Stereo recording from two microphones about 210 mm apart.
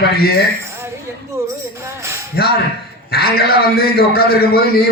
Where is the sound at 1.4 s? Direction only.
15° right (ahead or behind).